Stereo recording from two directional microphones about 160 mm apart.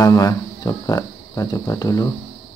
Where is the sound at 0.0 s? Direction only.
20° left (ahead or behind).